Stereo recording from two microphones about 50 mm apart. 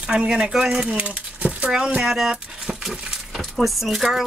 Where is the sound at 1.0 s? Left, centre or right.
Right.